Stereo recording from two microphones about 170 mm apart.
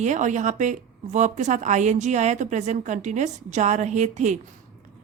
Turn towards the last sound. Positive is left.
turn(degrees=-45)  # may be behind; listen again after turning